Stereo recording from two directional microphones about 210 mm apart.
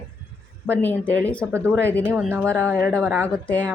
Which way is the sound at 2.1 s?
10° right (ahead or behind).